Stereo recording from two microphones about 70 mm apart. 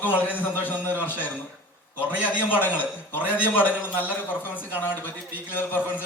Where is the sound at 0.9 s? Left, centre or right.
Right.